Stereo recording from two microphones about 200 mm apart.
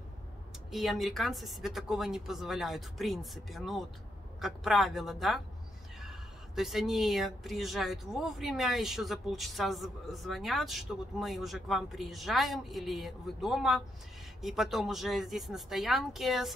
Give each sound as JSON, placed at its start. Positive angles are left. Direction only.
{"t": 0.7, "sound": "speech", "side_deg": 0}